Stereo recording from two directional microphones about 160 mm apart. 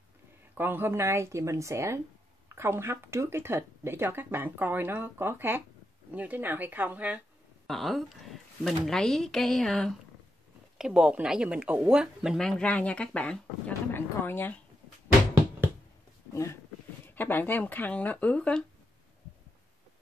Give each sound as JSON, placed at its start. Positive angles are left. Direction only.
{"t": 0.6, "sound": "speech", "side_deg": -15}
{"t": 7.6, "sound": "speech", "side_deg": 0}
{"t": 17.0, "sound": "speech", "side_deg": 10}